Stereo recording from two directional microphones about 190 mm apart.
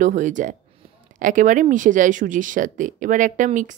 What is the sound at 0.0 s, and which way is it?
Speech, 40° right (ahead or behind).